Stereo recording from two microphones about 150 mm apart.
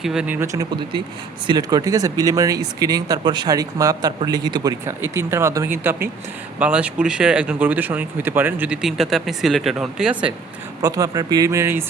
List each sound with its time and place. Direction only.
0.0 s speech: 5° right (ahead or behind); by 5.7 s 20° right (ahead or behind)
6.6 s speech: 10° right (ahead or behind)
10.8 s speech: 25° right (ahead or behind)